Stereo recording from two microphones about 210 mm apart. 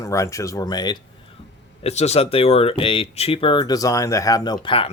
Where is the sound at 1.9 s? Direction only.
30° left (ahead or behind).